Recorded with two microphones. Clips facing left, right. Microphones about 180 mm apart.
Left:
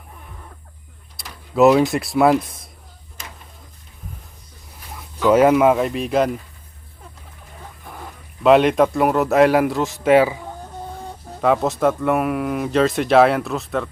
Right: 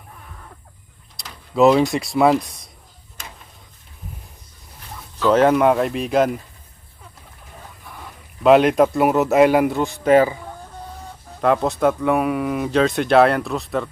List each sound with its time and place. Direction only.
1.1 s speech: 5° left (ahead or behind)
5.2 s speech: 10° left (ahead or behind)
8.4 s speech: centre (ahead or behind)